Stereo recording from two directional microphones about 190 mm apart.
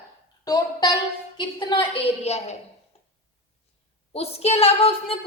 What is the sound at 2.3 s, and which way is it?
Speech, 35° left (ahead or behind).